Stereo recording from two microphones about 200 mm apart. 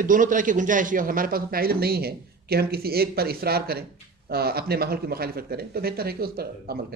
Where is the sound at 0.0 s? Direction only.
40° right (ahead or behind).